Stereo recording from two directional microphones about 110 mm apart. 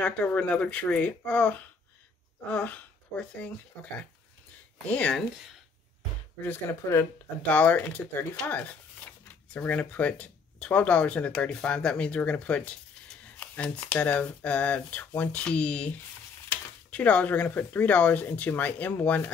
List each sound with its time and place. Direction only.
0.0 s speech: 15° left (ahead or behind)
4.8 s speech: 10° left (ahead or behind)
6.4 s speech: 20° left (ahead or behind)
7.4 s speech: 15° left (ahead or behind)
16.9 s speech: 10° left (ahead or behind)